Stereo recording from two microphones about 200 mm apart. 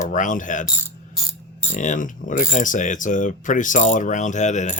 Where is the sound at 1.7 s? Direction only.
40° left (ahead or behind).